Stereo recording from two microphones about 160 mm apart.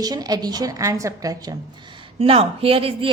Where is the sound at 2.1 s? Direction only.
35° right (ahead or behind).